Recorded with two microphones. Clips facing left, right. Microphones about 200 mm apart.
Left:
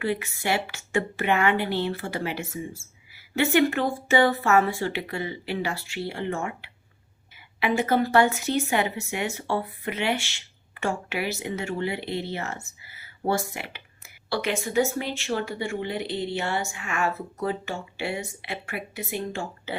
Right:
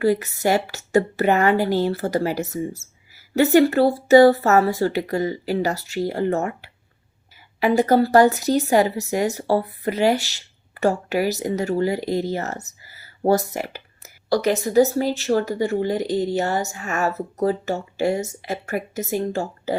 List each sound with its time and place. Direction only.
0.0 s speech: 40° right (ahead or behind)